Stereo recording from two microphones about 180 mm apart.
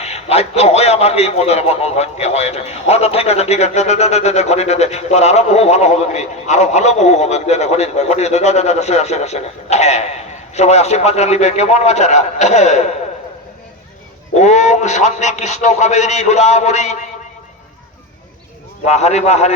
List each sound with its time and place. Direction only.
0.0 s a man's voice: 35° left (ahead or behind)
14.3 s a man's voice: 40° left (ahead or behind)
18.9 s a man's voice: 40° left (ahead or behind)